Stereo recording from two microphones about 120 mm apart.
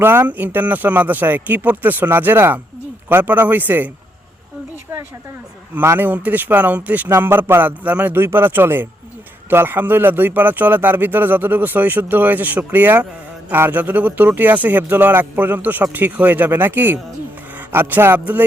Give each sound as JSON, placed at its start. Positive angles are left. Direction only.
{"t": 0.0, "sound": "speech", "side_deg": -20}
{"t": 5.7, "sound": "speech", "side_deg": -20}